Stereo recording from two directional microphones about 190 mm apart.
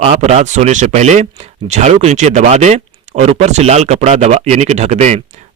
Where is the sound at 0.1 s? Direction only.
35° right (ahead or behind).